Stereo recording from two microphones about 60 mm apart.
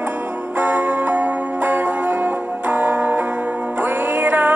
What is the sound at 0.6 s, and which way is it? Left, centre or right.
Music, right.